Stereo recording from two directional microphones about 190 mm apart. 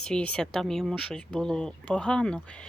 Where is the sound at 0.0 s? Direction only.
5° left (ahead or behind).